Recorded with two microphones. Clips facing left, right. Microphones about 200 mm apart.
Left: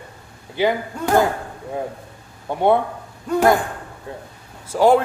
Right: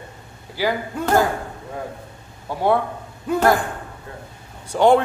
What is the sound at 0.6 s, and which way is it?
Speech, 20° left (ahead or behind).